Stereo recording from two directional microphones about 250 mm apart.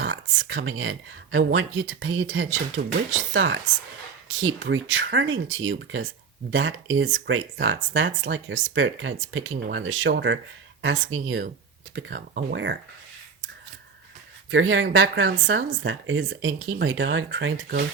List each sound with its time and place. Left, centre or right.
0.0 s speech: right
14.5 s speech: right